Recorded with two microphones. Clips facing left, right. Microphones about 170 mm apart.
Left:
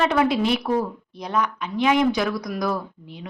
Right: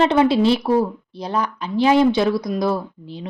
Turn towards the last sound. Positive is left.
turn(degrees=-30)  # may be behind; listen again after turning